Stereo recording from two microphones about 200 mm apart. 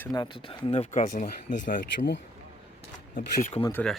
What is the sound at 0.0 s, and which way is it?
Speech, 20° left (ahead or behind).